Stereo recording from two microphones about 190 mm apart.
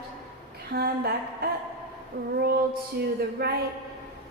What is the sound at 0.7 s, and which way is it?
A woman's voice, 55° right (ahead or behind).